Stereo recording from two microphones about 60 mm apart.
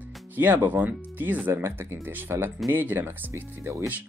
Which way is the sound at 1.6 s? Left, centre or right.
Right.